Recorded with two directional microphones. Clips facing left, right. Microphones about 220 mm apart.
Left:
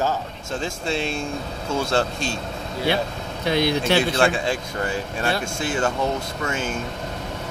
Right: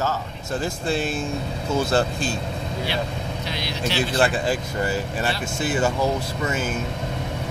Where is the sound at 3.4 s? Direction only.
55° left (ahead or behind).